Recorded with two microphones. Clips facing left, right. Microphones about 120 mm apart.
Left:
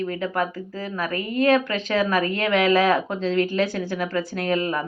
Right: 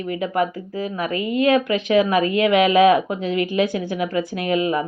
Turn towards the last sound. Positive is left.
turn(degrees=-15)  # may be behind; listen again after turning